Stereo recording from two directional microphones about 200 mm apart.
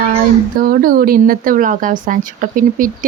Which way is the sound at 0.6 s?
45° right (ahead or behind).